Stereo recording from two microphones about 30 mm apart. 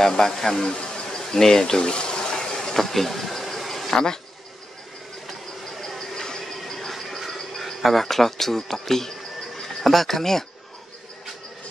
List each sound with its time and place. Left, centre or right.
0.0 s speech: centre
0.6 s insect: left
1.2 s speech: centre
1.9 s water: left; by 4.0 s centre
5.9 s a sound: centre
6.4 s a sound: centre
7.6 s speech: centre